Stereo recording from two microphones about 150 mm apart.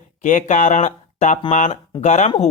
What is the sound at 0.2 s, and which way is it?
Speech, 55° left (ahead or behind).